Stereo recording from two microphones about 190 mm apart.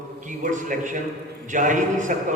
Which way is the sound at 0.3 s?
40° right (ahead or behind).